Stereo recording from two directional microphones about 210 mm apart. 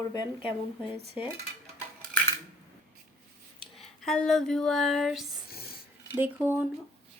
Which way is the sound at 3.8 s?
Centre (ahead or behind).